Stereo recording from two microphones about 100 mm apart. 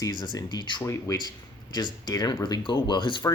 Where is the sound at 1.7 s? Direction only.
40° left (ahead or behind).